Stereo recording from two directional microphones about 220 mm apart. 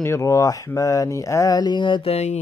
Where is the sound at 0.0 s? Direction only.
15° left (ahead or behind); by 2.4 s 30° left (ahead or behind).